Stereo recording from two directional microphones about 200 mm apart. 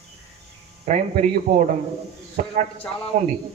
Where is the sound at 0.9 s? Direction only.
40° right (ahead or behind).